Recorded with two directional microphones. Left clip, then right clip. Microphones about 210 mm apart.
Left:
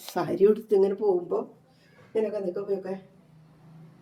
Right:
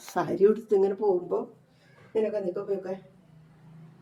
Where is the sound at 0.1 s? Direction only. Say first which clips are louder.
Left 1 dB; 5° left (ahead or behind).